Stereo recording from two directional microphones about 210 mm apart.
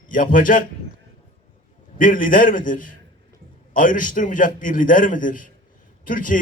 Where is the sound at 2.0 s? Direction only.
40° left (ahead or behind).